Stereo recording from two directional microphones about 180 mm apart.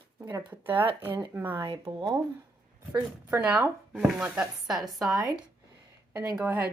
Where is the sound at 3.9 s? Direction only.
5° right (ahead or behind).